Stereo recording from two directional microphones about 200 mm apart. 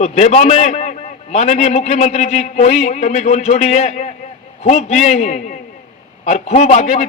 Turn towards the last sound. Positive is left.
turn(degrees=35)  # may be behind; listen again after turning